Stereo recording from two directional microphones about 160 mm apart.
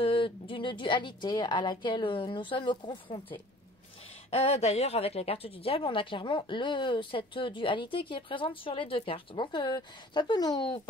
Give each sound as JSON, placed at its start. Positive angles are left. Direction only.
{"t": 0.0, "sound": "speech", "side_deg": 35}
{"t": 4.3, "sound": "speech", "side_deg": 40}